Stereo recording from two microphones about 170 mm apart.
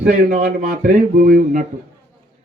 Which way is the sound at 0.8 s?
55° right (ahead or behind).